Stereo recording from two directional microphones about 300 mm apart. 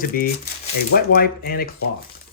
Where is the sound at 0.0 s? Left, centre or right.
Left.